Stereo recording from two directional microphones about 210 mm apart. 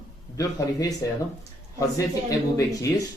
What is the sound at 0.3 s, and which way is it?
Speech, 15° left (ahead or behind).